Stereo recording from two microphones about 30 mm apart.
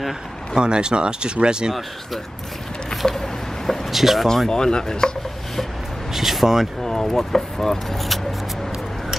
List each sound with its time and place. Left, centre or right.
0.6 s speech: right
2.9 s a sound: left
3.6 s a sound: centre
3.9 s speech: centre
4.5 s chopping: left
6.1 s speech: centre
6.8 s speech: centre